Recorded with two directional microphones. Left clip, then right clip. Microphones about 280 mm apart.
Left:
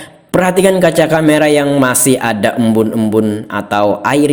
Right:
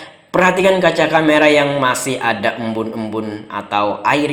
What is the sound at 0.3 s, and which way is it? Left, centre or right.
Speech, left.